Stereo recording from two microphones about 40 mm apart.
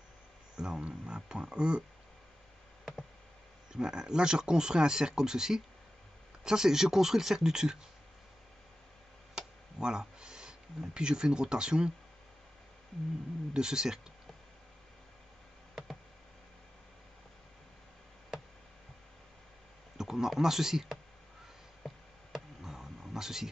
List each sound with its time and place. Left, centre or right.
0.6 s speech: right
3.7 s speech: centre
9.8 s speech: centre
13.5 s speech: centre
20.0 s speech: centre
21.8 s a sound: centre
22.6 s wild animals: centre